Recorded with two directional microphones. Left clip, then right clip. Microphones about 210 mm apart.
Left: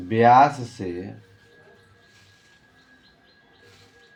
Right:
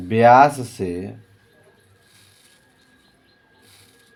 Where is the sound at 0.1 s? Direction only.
60° right (ahead or behind).